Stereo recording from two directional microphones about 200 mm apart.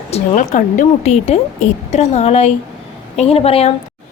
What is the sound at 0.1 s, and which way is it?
A woman's voice, 35° left (ahead or behind).